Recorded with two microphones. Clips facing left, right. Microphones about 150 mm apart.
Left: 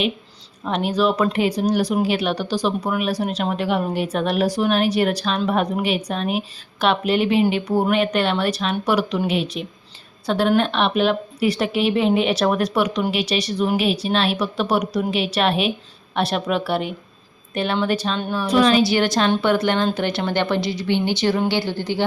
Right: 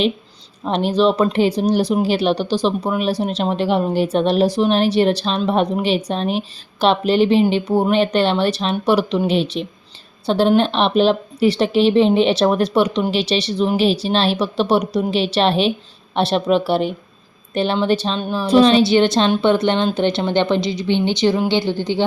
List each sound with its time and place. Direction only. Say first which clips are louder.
0.6 s speech: right 4 dB; 30° right (ahead or behind)